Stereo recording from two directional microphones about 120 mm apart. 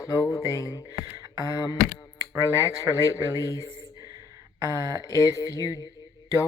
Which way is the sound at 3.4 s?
30° left (ahead or behind).